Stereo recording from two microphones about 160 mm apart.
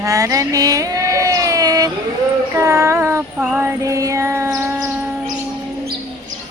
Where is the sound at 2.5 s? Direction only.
20° right (ahead or behind).